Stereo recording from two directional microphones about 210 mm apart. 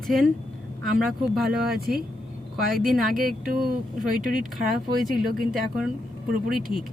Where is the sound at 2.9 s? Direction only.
Centre (ahead or behind).